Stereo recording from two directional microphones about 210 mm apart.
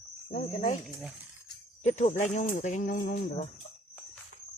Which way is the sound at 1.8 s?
35° left (ahead or behind).